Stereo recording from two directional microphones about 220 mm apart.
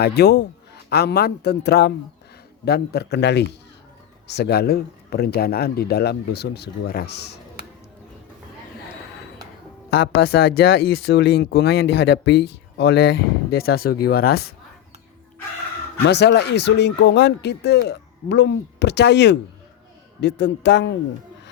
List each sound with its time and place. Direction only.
0.0 s speech: 50° left (ahead or behind)
9.9 s speech: 45° left (ahead or behind)
16.0 s speech: 50° left (ahead or behind)